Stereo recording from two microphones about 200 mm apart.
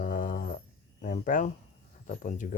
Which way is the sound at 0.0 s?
45° left (ahead or behind).